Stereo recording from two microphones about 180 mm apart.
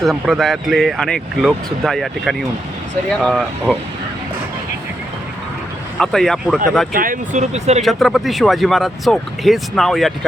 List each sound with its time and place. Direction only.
0.0 s speech: centre (ahead or behind)
6.0 s speech: centre (ahead or behind)
6.9 s speech: 50° right (ahead or behind)
7.8 s speech: centre (ahead or behind)